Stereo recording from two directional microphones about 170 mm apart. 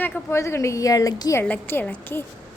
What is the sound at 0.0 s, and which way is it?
A woman's voice, 15° left (ahead or behind).